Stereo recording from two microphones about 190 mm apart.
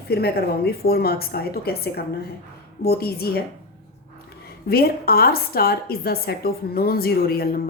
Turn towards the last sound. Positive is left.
turn(degrees=55)  # may be behind; listen again after turning